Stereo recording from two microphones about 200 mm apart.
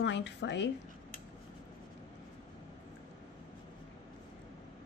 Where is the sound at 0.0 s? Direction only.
60° left (ahead or behind).